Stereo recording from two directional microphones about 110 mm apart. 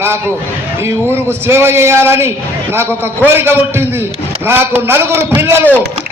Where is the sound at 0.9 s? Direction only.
25° right (ahead or behind).